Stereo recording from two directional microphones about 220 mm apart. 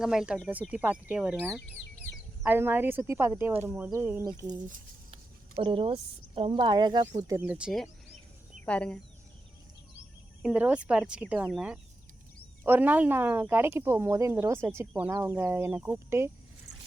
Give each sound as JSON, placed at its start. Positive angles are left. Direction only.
{"t": 0.0, "sound": "speech", "side_deg": -5}
{"t": 5.1, "sound": "a woman's voice", "side_deg": -25}
{"t": 10.4, "sound": "speech", "side_deg": -5}